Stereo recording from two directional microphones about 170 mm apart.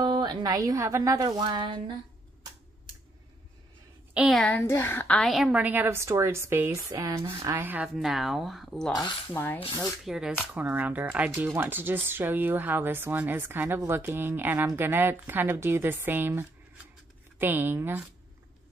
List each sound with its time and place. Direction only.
0.0 s a woman's voice: 25° right (ahead or behind)
4.1 s a woman's voice: 5° right (ahead or behind)
4.4 s speech: 10° left (ahead or behind)
8.9 s speech: 20° left (ahead or behind)
10.0 s speech: 5° right (ahead or behind)